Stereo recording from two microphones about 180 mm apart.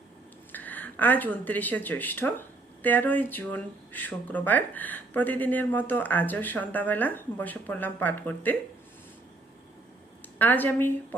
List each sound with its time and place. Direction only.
0.5 s speech: 10° left (ahead or behind)
10.3 s speech: 10° left (ahead or behind)